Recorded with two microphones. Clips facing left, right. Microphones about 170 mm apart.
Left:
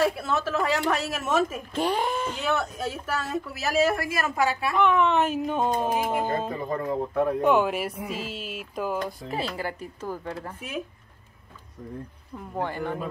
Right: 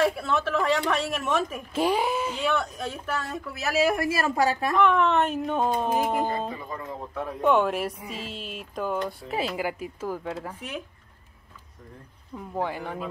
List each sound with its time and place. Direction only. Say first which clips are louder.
0.0 s a woman's voice: even; 5° left (ahead or behind)
1.7 s speech: right 1 dB; 5° right (ahead or behind)
2.5 s a woman's voice: left 1 dB; 5° left (ahead or behind)
3.8 s a woman's voice: right 3 dB; 20° right (ahead or behind); by 4.7 s 40° right (ahead or behind)
4.7 s a woman's voice: even; centre (ahead or behind)
6.5 s speech: left 8 dB; 50° left (ahead or behind)
7.4 s a woman's voice: right 4 dB; centre (ahead or behind)
9.3 s a woman's voice: right 4 dB; 10° right (ahead or behind)
12.4 s a woman's voice: even; 5° right (ahead or behind)